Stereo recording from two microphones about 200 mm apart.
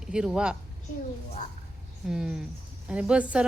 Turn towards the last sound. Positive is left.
turn(degrees=-5)  # may be behind; listen again after turning